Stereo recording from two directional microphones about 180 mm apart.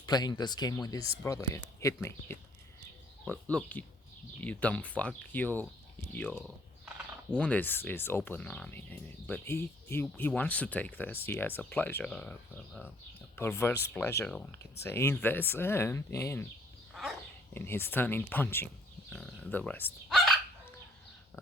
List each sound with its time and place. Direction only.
0.0 s speech: 20° left (ahead or behind)
16.9 s dog: centre (ahead or behind)
17.5 s speech: 10° left (ahead or behind)